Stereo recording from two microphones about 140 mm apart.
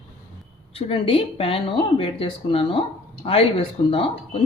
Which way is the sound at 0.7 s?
45° left (ahead or behind).